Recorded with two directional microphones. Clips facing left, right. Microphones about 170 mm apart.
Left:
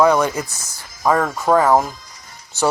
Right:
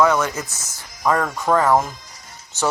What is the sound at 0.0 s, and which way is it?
Speech, 15° left (ahead or behind).